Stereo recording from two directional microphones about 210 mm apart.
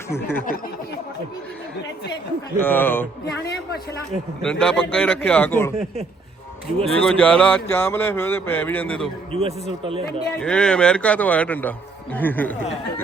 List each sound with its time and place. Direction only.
0.1 s speech: 10° left (ahead or behind)
2.6 s speech: 10° left (ahead or behind)
4.6 s speech: 5° left (ahead or behind)
6.7 s speech: 5° left (ahead or behind)
9.3 s a man's voice: 25° right (ahead or behind)
10.4 s speech: 5° left (ahead or behind)